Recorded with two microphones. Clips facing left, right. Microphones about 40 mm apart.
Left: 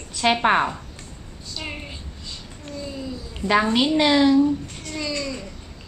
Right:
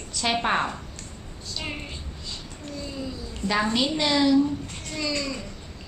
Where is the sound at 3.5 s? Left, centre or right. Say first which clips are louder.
Left 5 dB; left.